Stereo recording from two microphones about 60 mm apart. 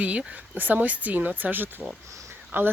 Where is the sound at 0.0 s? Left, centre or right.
Right.